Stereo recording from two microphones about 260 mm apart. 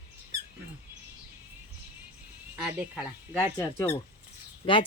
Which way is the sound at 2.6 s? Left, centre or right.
Centre.